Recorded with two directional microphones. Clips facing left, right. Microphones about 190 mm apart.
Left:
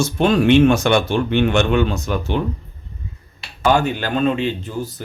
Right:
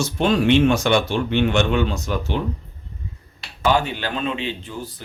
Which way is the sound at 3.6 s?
45° left (ahead or behind).